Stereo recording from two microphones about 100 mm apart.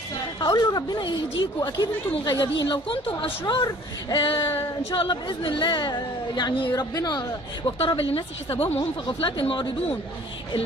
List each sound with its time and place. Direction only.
0.4 s speech: 40° left (ahead or behind); by 3.3 s 60° left (ahead or behind)
3.4 s speech: 50° left (ahead or behind)
7.8 s a woman's voice: 65° left (ahead or behind)
9.2 s speech: 55° left (ahead or behind)